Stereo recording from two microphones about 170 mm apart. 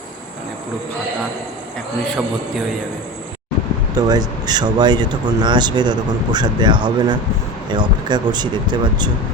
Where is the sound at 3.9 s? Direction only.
25° right (ahead or behind).